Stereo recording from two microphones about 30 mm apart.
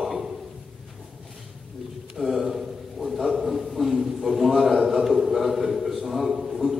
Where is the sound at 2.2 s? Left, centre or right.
Right.